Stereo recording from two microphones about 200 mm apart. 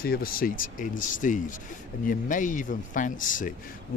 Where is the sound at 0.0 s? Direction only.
45° left (ahead or behind).